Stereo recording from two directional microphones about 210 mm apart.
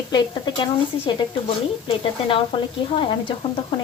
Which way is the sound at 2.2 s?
25° left (ahead or behind).